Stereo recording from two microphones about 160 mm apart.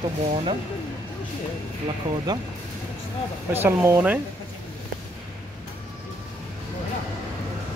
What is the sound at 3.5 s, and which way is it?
Speech, 15° right (ahead or behind).